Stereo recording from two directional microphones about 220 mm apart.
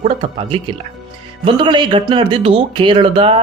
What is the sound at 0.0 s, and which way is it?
Speech, 25° right (ahead or behind).